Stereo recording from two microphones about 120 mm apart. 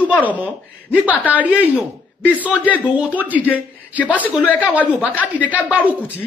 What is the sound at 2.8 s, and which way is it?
Speech, 10° right (ahead or behind).